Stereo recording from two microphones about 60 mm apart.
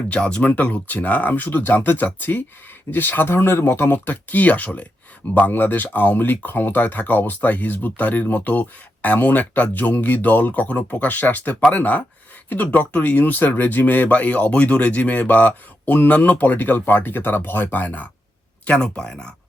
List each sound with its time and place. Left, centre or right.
0.1 s speech: centre